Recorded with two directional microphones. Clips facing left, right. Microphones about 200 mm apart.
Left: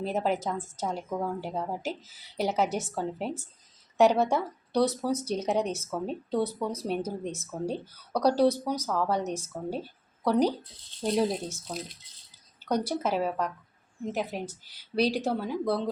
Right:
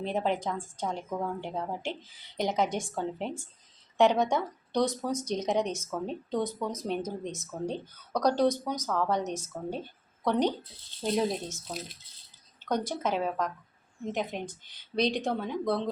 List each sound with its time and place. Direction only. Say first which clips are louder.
0.0 s a woman's voice: left 1 dB; 5° left (ahead or behind)
12.6 s a woman's voice: left 2 dB; 10° left (ahead or behind)